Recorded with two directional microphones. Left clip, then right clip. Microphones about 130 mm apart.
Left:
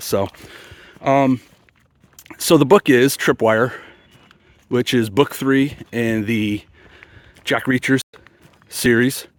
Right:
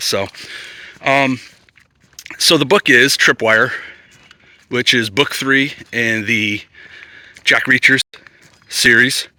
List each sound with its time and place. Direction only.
0.0 s speech: 50° left (ahead or behind)
0.3 s a sound: 55° left (ahead or behind)
1.0 s speech: 30° left (ahead or behind)
2.1 s speech: 45° left (ahead or behind)